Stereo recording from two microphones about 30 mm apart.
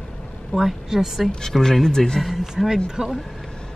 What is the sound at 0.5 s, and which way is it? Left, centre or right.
Speech, centre.